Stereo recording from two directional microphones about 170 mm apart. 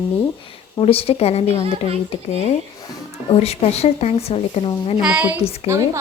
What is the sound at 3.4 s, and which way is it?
A woman's voice, 40° left (ahead or behind).